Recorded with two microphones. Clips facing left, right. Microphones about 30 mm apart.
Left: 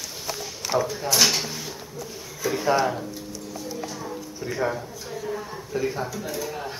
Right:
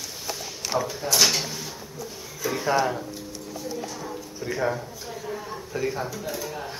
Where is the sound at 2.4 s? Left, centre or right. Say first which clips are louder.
Left 1 dB; centre.